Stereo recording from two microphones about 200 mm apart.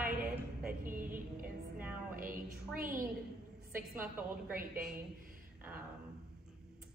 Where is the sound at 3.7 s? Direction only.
10° right (ahead or behind).